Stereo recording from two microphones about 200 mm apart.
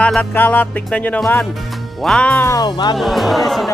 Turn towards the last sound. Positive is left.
turn(degrees=0)  # may be behind; listen again after turning